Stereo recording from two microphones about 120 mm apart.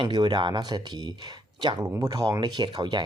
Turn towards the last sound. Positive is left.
turn(degrees=-40)  # may be behind; listen again after turning